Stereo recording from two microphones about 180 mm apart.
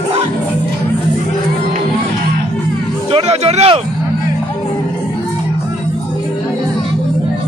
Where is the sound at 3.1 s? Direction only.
35° right (ahead or behind).